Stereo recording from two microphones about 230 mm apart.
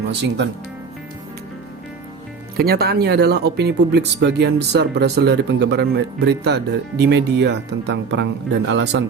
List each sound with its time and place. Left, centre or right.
0.1 s speech: right
2.6 s speech: right